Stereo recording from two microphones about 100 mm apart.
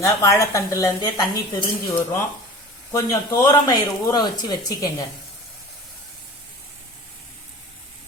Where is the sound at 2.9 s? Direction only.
35° left (ahead or behind).